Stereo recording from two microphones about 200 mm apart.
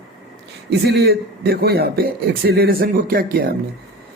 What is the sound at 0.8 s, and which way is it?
A man's voice, 50° right (ahead or behind).